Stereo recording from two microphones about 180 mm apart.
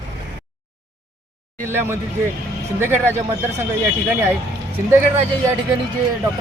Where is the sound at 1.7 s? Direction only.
15° right (ahead or behind).